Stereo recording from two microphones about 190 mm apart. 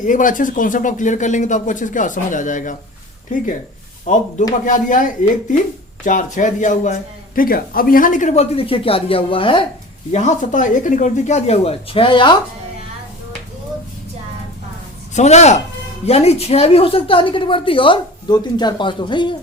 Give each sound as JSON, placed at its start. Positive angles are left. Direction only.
{"t": 0.0, "sound": "speech", "side_deg": 45}
{"t": 10.1, "sound": "speech", "side_deg": 40}
{"t": 15.1, "sound": "a woman's voice", "side_deg": 35}